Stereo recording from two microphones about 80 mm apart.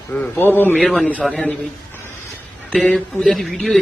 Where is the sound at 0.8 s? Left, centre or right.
Centre.